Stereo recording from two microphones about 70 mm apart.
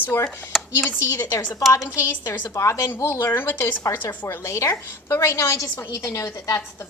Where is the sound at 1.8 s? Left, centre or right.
Left.